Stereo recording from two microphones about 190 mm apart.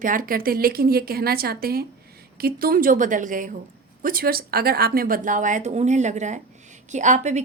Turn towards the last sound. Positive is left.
turn(degrees=-40)  # may be behind; listen again after turning